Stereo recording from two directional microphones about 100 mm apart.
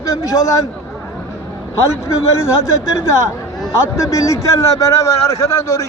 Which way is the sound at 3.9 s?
30° left (ahead or behind).